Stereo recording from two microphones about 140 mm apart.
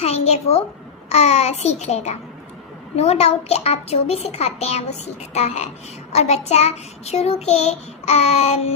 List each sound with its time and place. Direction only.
0.0 s a child's voice: 50° left (ahead or behind)